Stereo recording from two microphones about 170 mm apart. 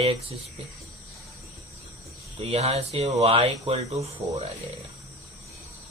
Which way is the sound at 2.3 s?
35° right (ahead or behind).